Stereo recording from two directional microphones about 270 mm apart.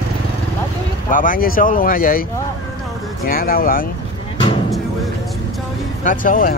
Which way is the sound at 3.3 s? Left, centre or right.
Left.